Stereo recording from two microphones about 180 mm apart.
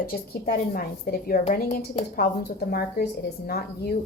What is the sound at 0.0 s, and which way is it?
A woman's voice, 55° left (ahead or behind).